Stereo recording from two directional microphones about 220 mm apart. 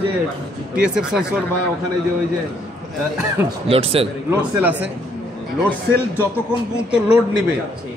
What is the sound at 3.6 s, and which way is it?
Speech, 25° right (ahead or behind).